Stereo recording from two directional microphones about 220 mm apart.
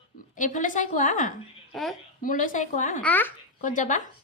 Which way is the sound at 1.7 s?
Centre (ahead or behind).